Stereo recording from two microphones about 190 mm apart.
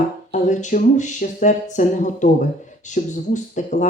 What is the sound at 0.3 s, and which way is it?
Speech, 40° left (ahead or behind).